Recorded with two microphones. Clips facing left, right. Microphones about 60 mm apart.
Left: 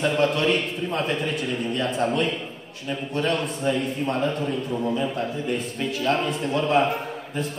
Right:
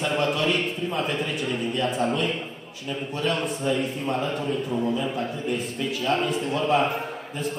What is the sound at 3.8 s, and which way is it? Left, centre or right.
A man's voice, centre.